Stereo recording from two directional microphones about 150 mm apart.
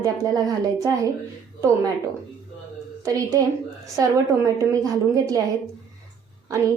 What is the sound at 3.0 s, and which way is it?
Speech, 25° right (ahead or behind).